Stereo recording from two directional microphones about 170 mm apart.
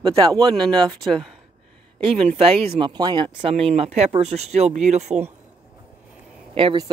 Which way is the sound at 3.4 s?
35° right (ahead or behind).